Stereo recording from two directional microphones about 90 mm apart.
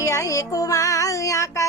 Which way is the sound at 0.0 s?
35° left (ahead or behind).